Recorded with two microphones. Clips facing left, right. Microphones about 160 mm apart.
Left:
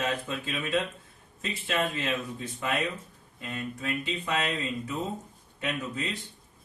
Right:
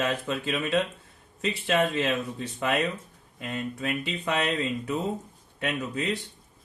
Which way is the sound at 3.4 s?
75° right (ahead or behind).